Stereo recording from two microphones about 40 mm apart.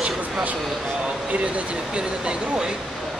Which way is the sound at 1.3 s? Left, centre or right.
Right.